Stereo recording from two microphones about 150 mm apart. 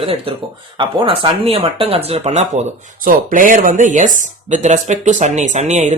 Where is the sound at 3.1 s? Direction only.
60° right (ahead or behind).